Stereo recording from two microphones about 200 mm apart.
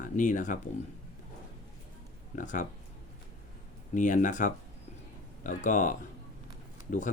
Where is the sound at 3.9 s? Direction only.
40° left (ahead or behind).